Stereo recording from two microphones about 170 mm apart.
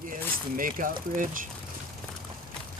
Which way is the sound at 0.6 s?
50° right (ahead or behind).